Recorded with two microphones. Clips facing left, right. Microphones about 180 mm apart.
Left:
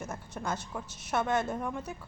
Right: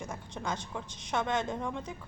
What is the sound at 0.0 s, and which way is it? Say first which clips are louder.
A woman's voice: left 1 dB; 5° left (ahead or behind).